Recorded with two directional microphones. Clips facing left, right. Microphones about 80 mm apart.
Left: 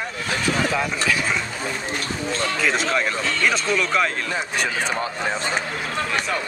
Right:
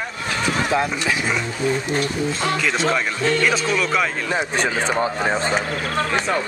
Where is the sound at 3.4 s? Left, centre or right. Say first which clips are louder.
Right 1 dB; centre.